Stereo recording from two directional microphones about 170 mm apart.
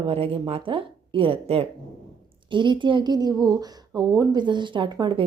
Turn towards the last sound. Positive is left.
turn(degrees=-25)  # may be behind; listen again after turning